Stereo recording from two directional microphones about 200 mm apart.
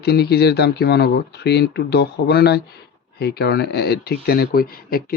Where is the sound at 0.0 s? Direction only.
55° left (ahead or behind).